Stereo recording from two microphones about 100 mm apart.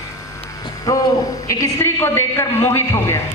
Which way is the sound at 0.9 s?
35° left (ahead or behind).